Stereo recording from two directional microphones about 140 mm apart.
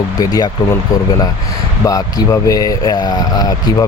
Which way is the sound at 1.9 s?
25° left (ahead or behind).